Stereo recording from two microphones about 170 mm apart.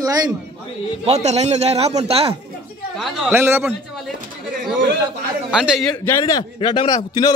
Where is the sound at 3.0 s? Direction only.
10° right (ahead or behind).